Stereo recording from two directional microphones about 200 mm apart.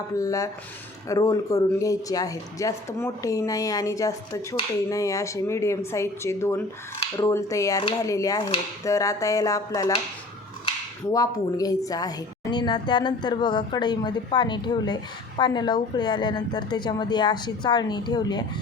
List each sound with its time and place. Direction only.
0.2 s speech: 15° left (ahead or behind)
11.1 s a woman's voice: 20° left (ahead or behind)